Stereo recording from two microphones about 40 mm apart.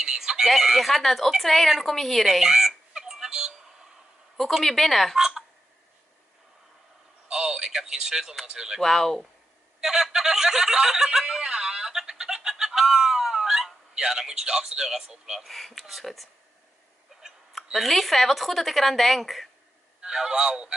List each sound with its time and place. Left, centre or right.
0.0 s chicken: centre
0.5 s a woman's voice: centre
2.2 s music: centre
4.4 s a woman's voice: centre
5.1 s speech: centre
7.2 s a sound: right
8.5 s speech: centre
8.8 s a woman's voice: centre
9.8 s snicker: centre
15.4 s a woman's voice: centre
17.1 s a sound: centre
17.7 s a woman's voice: centre
20.0 s a man's voice: centre